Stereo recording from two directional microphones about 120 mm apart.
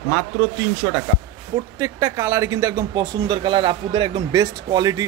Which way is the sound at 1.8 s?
25° right (ahead or behind).